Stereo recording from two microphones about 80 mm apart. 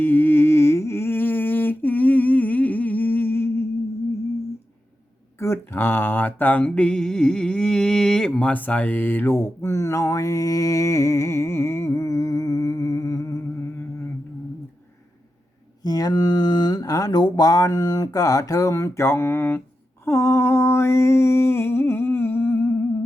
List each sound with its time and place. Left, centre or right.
0.0 s humming: left
5.4 s mantra: left
15.8 s speech: left
20.1 s a sound: left